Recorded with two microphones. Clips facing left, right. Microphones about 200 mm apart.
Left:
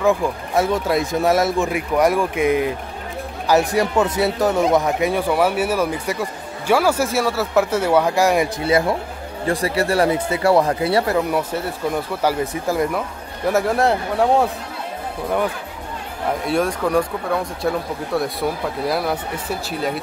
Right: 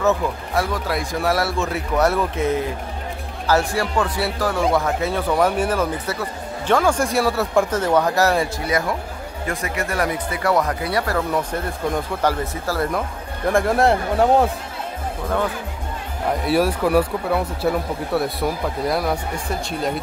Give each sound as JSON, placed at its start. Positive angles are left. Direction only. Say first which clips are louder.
{"t": 0.0, "sound": "speech", "louder": "left 2 dB", "side_deg": 10}
{"t": 0.7, "sound": "speech", "louder": "left 5 dB", "side_deg": 25}
{"t": 11.1, "sound": "speech", "louder": "left 2 dB", "side_deg": 10}
{"t": 13.5, "sound": "speech", "louder": "even", "side_deg": 5}
{"t": 16.4, "sound": "speech", "louder": "right 2 dB", "side_deg": -5}